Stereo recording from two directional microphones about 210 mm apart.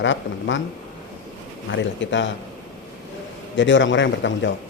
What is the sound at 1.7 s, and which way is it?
Speech, 60° left (ahead or behind).